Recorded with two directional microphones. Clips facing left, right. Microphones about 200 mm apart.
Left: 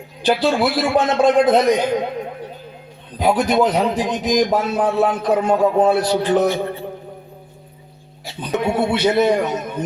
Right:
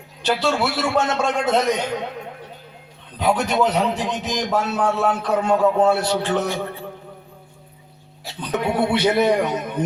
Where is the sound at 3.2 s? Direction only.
35° left (ahead or behind).